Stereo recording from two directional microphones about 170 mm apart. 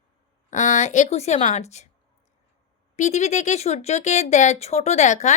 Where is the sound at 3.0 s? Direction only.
45° left (ahead or behind).